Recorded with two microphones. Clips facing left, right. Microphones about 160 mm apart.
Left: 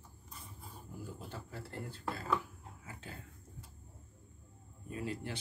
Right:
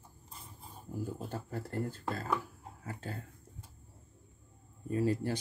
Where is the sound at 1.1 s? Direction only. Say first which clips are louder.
Right 7 dB; 45° right (ahead or behind).